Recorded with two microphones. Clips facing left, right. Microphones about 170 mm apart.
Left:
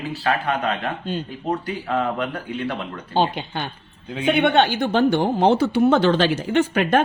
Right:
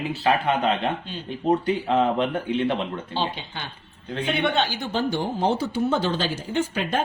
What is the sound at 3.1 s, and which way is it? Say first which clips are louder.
Speech: left 7 dB; 55° left (ahead or behind).